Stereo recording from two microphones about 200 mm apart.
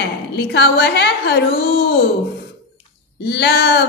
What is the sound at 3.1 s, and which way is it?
Speech, 55° left (ahead or behind).